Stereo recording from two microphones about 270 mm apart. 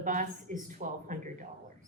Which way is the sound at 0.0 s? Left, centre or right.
Right.